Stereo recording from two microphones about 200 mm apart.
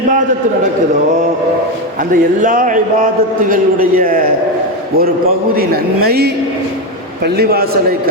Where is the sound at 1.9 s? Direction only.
45° right (ahead or behind).